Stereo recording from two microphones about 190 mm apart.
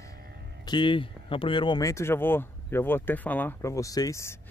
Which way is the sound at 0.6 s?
25° left (ahead or behind).